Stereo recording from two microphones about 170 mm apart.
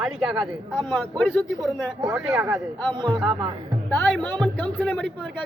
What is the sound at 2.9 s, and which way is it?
Speech, 25° right (ahead or behind).